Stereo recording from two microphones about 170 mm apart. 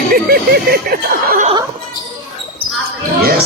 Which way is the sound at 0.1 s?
60° right (ahead or behind).